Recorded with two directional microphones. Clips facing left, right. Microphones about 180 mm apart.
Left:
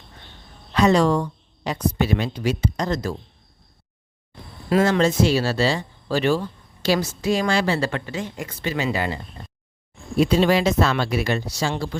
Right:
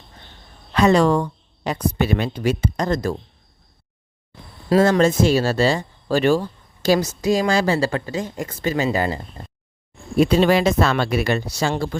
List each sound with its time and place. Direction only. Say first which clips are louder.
0.7 s a woman's voice: right 2 dB; 55° right (ahead or behind)
4.9 s speech: right 2 dB; 50° right (ahead or behind)
10.2 s speech: right 2 dB; 55° right (ahead or behind)